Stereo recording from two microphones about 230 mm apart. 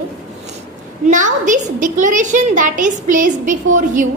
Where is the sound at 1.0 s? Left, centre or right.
Right.